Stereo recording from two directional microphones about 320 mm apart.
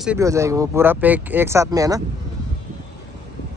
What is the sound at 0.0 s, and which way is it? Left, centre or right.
Speech, centre.